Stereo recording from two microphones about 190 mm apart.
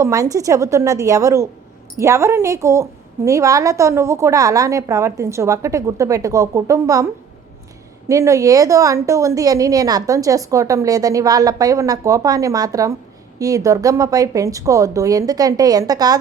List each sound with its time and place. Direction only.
0.0 s a woman's voice: 15° right (ahead or behind)